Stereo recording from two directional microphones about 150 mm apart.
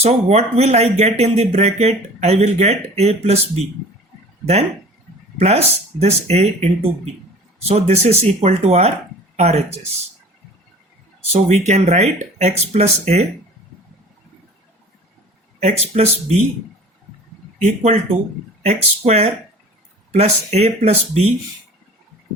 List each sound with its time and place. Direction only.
0.0 s speech: 45° right (ahead or behind)
5.4 s speech: 45° right (ahead or behind)
11.3 s speech: 45° right (ahead or behind)
15.6 s speech: 45° right (ahead or behind)
17.6 s speech: 50° right (ahead or behind)